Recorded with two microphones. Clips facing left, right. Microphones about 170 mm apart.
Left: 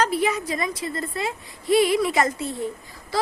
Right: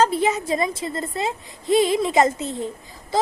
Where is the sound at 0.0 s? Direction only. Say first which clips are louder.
Right 3 dB; 25° right (ahead or behind).